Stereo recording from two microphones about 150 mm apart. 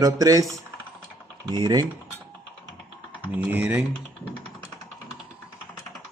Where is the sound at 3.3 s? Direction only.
10° right (ahead or behind).